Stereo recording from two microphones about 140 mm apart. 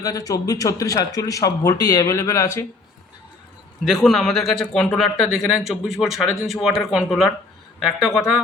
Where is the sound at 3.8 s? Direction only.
Centre (ahead or behind).